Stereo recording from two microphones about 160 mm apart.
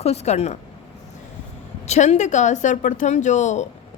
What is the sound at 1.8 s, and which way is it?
A woman's voice, 45° left (ahead or behind).